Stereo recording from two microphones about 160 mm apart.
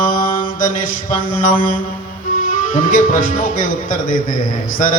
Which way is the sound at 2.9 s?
60° left (ahead or behind).